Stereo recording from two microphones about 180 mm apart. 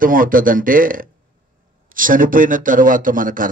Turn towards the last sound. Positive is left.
turn(degrees=-50)  # may be behind; listen again after turning